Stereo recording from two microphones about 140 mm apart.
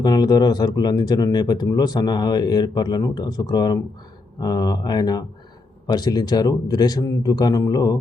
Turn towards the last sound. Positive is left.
turn(degrees=25)  # may be behind; listen again after turning